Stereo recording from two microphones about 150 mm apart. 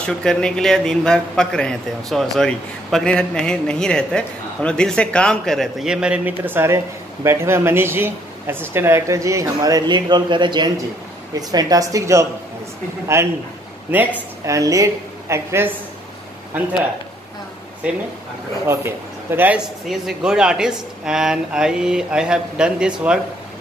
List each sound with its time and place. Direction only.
0.0 s a man's voice: 5° left (ahead or behind); by 15.7 s 15° right (ahead or behind)
17.8 s a man's voice: 5° right (ahead or behind)